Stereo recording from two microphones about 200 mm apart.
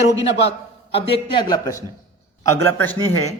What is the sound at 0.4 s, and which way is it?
A man's voice, 30° left (ahead or behind).